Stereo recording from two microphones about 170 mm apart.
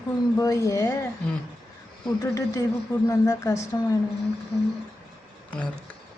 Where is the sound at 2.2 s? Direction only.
20° left (ahead or behind).